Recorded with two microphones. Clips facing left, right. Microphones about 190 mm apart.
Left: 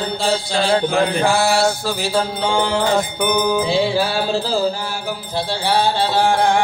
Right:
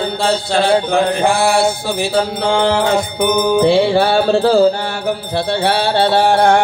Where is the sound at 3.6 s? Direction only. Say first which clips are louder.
Right 6 dB; 70° right (ahead or behind).